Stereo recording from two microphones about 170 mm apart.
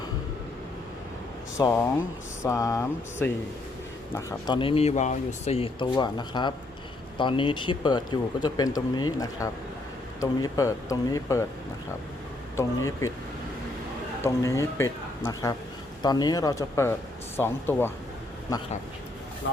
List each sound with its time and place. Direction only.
1.5 s speech: 15° left (ahead or behind)
12.5 s speech: 15° left (ahead or behind)
14.2 s speech: 15° left (ahead or behind)